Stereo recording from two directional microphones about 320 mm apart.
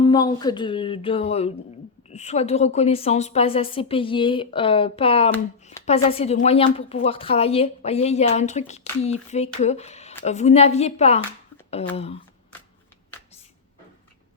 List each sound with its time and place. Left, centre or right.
0.0 s a woman's voice: centre